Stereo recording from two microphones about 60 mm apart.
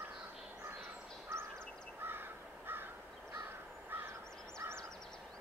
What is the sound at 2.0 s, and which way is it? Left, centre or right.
Crow, right.